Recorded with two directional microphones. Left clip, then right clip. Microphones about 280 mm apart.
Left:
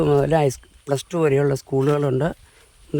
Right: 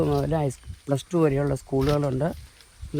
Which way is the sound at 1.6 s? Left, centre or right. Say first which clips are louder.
Left 4 dB; left.